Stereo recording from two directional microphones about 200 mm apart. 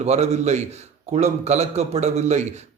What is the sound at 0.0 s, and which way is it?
A man's voice, 35° right (ahead or behind).